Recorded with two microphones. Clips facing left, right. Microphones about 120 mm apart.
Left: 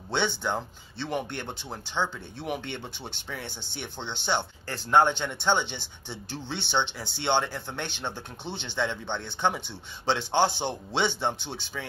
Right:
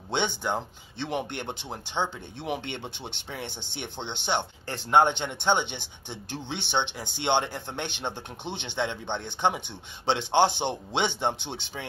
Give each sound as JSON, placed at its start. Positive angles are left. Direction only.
{"t": 0.1, "sound": "speech", "side_deg": -15}